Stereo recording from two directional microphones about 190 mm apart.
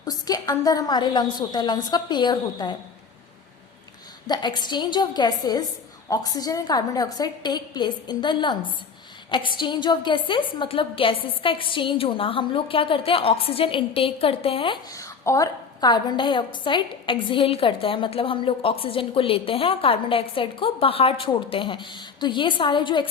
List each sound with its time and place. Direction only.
0.0 s a woman's voice: 20° left (ahead or behind)
4.3 s a woman's voice: 20° left (ahead or behind)
14.9 s a woman's voice: 15° left (ahead or behind)